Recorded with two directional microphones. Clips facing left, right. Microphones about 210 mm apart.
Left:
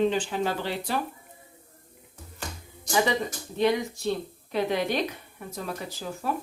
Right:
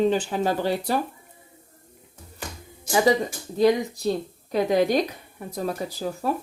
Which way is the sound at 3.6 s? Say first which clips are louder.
Right 5 dB; 35° right (ahead or behind).